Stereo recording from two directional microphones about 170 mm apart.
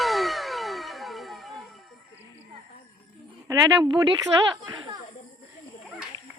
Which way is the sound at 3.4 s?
20° right (ahead or behind).